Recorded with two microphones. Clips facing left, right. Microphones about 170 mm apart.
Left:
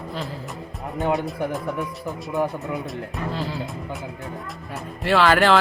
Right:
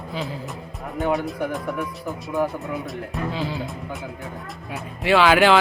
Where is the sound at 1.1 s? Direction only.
Centre (ahead or behind).